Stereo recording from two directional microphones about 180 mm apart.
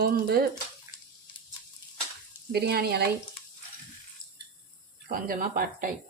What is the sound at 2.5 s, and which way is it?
Speech, 65° right (ahead or behind).